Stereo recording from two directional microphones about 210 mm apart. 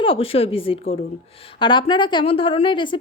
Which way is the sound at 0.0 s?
25° left (ahead or behind).